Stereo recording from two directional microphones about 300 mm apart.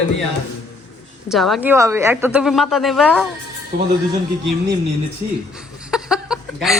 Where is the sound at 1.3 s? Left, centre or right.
Centre.